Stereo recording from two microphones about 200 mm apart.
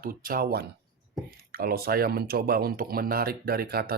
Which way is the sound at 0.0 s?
45° right (ahead or behind).